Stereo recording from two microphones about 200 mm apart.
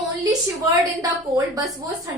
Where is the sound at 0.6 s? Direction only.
15° right (ahead or behind).